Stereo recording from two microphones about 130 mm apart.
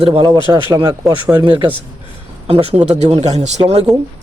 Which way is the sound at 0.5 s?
30° right (ahead or behind).